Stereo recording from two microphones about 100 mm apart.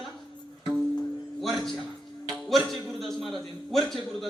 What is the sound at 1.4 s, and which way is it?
Speech, centre (ahead or behind).